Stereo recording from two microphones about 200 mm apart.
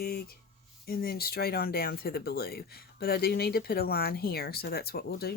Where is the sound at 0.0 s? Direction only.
50° left (ahead or behind).